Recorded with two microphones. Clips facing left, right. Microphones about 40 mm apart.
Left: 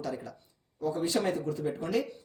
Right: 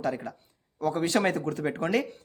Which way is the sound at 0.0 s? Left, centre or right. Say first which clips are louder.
Right 6 dB; right.